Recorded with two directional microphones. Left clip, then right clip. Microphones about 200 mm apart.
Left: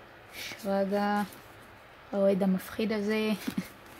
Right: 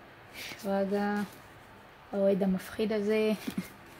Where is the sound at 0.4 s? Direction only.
Centre (ahead or behind).